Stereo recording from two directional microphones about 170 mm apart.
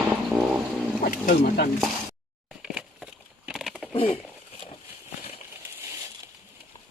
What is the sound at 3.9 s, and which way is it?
Speech, 35° left (ahead or behind).